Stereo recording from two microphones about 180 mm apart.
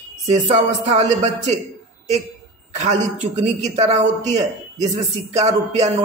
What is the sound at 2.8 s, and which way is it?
A man's voice, 40° right (ahead or behind).